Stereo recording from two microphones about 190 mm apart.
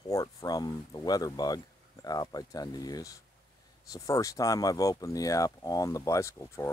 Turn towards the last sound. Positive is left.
turn(degrees=15)  # may be behind; listen again after turning